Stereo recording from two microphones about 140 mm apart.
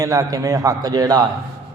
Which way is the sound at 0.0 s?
25° right (ahead or behind).